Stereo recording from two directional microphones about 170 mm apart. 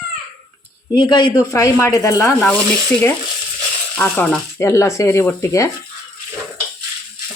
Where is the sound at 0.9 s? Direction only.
25° left (ahead or behind).